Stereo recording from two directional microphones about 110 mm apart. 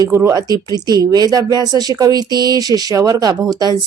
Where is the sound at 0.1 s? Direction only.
20° right (ahead or behind).